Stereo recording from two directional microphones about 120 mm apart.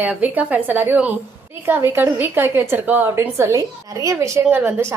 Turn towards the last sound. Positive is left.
turn(degrees=-15)  # may be behind; listen again after turning